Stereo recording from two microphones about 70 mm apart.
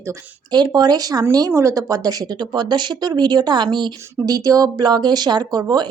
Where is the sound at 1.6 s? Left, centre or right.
Right.